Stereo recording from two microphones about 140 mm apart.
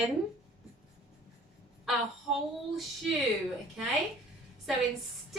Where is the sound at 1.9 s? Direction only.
Centre (ahead or behind).